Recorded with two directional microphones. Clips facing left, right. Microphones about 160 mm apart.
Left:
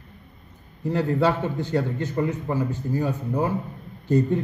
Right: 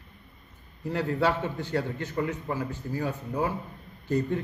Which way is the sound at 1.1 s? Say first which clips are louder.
Left 4 dB; 15° left (ahead or behind).